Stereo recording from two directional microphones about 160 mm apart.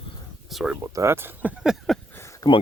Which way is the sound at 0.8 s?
15° right (ahead or behind).